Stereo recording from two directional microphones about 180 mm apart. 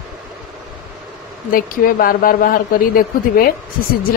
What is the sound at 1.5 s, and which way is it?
Speech, 50° left (ahead or behind).